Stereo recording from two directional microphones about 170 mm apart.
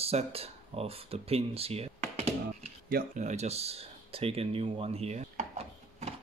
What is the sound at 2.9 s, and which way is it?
Speech, 55° right (ahead or behind).